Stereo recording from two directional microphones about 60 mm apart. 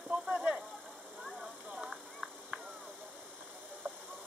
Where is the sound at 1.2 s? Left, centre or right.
Centre.